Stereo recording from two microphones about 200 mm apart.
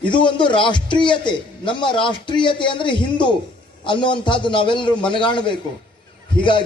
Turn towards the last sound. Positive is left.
turn(degrees=25)  # may be behind; listen again after turning